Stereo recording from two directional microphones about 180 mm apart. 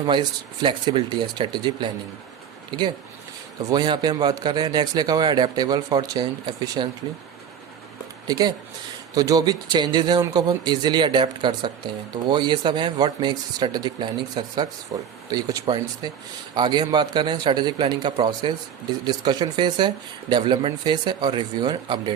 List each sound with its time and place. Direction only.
0.0 s a man's voice: 25° right (ahead or behind)
3.7 s a man's voice: 25° right (ahead or behind)
8.3 s a man's voice: 20° right (ahead or behind)